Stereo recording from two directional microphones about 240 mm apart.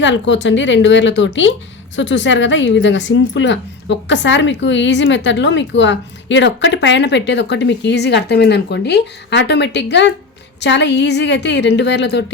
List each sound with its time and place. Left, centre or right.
0.0 s a woman's voice: left